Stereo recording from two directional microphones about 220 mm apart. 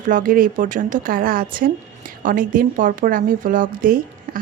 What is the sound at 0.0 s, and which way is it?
Speech, 35° right (ahead or behind).